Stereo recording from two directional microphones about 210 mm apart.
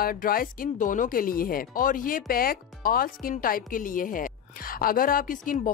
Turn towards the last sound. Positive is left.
turn(degrees=40)  # may be behind; listen again after turning